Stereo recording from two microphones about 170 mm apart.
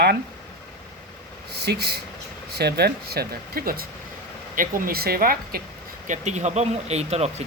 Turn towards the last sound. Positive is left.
turn(degrees=-40)  # may be behind; listen again after turning